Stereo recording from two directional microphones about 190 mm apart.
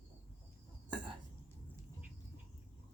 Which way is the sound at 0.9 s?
25° right (ahead or behind).